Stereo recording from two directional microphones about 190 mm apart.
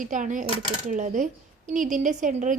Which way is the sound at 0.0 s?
40° right (ahead or behind).